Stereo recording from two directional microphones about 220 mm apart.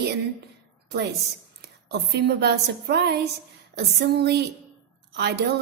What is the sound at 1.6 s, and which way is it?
A woman's voice, 50° right (ahead or behind).